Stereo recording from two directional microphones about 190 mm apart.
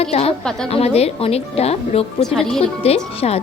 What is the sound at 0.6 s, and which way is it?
A woman's voice, 30° left (ahead or behind).